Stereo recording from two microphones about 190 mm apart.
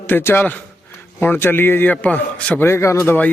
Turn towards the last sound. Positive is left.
turn(degrees=15)  # may be behind; listen again after turning